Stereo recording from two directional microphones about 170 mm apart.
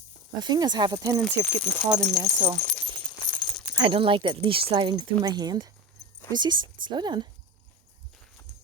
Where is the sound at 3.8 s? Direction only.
30° right (ahead or behind).